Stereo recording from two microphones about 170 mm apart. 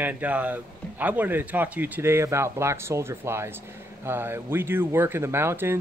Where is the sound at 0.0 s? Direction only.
10° right (ahead or behind).